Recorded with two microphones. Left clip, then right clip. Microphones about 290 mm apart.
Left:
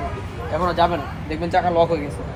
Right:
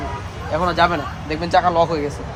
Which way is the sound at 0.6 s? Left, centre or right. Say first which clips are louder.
Right 2 dB; right.